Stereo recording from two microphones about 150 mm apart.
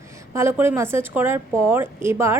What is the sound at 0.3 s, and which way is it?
A woman's voice, 15° right (ahead or behind).